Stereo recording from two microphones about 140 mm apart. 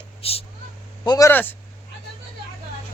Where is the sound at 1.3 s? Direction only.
15° left (ahead or behind).